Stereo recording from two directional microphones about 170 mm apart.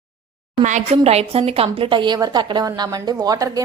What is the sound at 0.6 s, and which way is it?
A woman's voice, 40° right (ahead or behind).